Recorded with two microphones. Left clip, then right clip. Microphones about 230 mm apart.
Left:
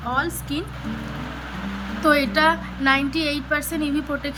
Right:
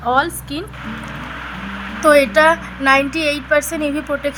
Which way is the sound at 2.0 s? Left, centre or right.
Right.